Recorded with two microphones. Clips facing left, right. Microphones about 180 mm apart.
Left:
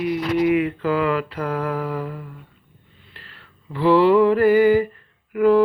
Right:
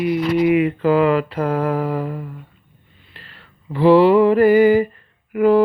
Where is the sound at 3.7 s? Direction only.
15° right (ahead or behind).